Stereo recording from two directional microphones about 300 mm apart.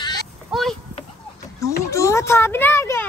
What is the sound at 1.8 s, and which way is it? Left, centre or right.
A woman's voice, centre.